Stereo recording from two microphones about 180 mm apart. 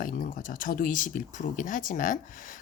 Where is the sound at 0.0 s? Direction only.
50° left (ahead or behind).